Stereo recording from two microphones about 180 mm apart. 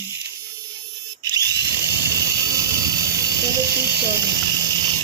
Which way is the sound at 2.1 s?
15° right (ahead or behind).